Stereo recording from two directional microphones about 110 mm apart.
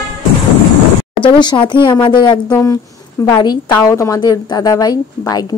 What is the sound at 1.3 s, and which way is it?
A woman's voice, 45° left (ahead or behind).